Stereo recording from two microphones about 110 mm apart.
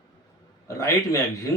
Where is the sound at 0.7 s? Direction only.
25° left (ahead or behind).